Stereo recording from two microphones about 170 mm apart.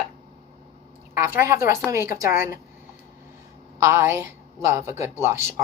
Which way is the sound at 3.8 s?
15° right (ahead or behind).